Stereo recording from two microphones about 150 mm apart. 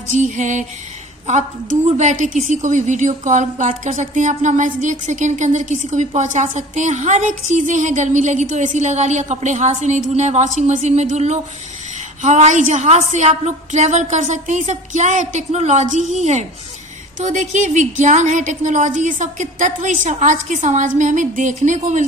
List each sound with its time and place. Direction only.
0.1 s a woman's voice: 55° right (ahead or behind)